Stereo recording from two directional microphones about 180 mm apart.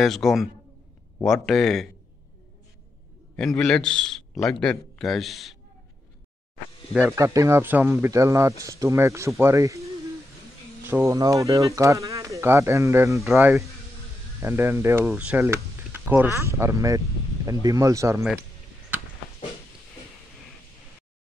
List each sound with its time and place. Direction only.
0.0 s a man's voice: centre (ahead or behind)
3.3 s a man's voice: 5° left (ahead or behind)
6.9 s a man's voice: 5° right (ahead or behind)
7.2 s speech: 15° right (ahead or behind)
10.9 s speech: 15° right (ahead or behind)